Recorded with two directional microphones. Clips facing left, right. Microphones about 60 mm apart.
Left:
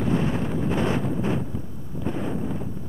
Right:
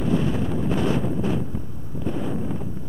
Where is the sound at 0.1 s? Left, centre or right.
Left.